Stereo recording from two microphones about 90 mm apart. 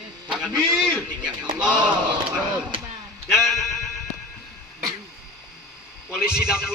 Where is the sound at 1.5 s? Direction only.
10° right (ahead or behind).